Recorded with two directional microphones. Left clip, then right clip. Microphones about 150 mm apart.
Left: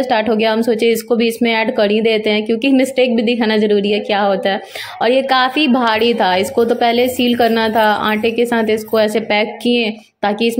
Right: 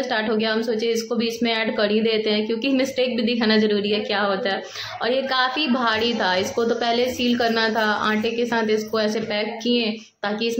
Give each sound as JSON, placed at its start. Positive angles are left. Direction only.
{"t": 0.0, "sound": "a woman's voice", "side_deg": 45}